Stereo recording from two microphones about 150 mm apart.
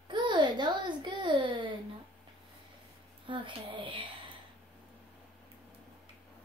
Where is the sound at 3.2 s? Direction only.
35° right (ahead or behind).